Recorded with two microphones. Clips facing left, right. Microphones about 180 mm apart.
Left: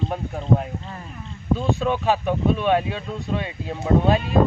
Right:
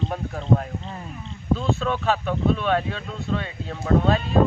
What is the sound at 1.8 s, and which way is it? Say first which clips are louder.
Speech: left 2 dB; 15° left (ahead or behind).